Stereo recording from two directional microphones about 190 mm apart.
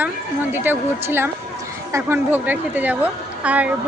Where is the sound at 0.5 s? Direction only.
10° right (ahead or behind).